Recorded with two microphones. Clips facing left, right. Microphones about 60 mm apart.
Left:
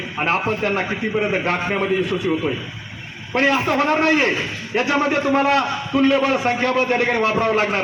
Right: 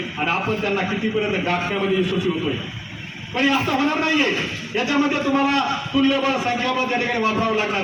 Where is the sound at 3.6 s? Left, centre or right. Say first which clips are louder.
Left 3 dB; left.